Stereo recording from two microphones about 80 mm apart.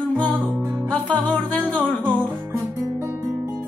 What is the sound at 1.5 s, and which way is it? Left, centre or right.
Music, centre.